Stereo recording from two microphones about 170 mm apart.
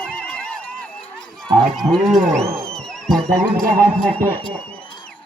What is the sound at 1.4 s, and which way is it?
Speech, centre (ahead or behind).